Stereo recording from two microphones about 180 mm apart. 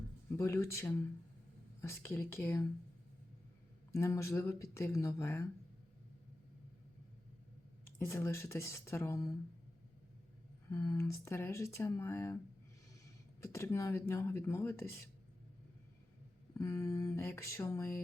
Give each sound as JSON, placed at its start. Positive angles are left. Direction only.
{"t": 0.3, "sound": "speech", "side_deg": 15}
{"t": 3.9, "sound": "speech", "side_deg": 15}
{"t": 7.9, "sound": "speech", "side_deg": 15}
{"t": 10.7, "sound": "speech", "side_deg": 15}
{"t": 13.4, "sound": "speech", "side_deg": 15}
{"t": 16.6, "sound": "speech", "side_deg": 15}